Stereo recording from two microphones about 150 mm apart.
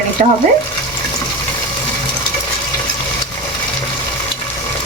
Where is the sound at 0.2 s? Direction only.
60° right (ahead or behind).